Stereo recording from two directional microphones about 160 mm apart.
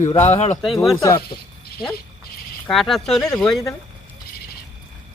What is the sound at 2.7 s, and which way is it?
Speech, centre (ahead or behind).